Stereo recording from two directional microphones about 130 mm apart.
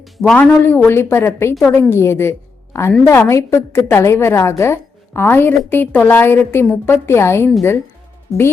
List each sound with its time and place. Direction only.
0.0 s a woman's voice: 5° left (ahead or behind)